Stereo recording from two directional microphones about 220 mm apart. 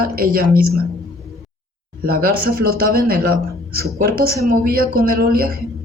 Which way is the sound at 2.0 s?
40° right (ahead or behind).